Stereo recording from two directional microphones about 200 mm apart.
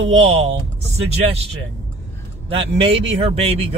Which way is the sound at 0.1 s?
30° right (ahead or behind).